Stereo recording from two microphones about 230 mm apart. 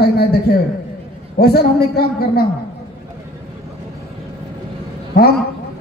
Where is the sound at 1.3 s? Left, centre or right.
Left.